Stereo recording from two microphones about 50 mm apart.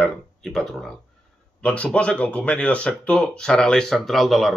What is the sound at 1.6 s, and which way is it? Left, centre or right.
A man's voice, left.